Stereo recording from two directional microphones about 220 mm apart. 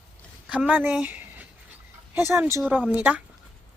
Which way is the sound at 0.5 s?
5° right (ahead or behind).